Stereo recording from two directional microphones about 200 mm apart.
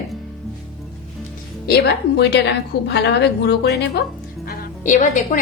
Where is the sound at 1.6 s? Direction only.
55° left (ahead or behind).